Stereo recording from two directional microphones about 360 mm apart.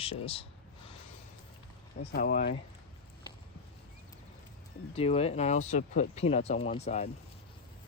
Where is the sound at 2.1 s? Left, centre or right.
Left.